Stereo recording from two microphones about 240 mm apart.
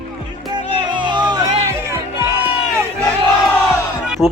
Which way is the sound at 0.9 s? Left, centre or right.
Centre.